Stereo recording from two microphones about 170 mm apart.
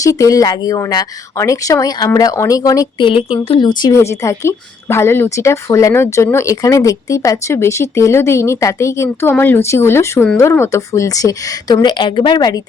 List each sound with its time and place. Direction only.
0.0 s speech: 20° left (ahead or behind)